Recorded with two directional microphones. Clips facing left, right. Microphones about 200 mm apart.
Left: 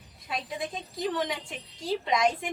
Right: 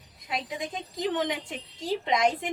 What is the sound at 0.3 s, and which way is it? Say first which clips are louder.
A woman's voice: right 1 dB; 15° right (ahead or behind).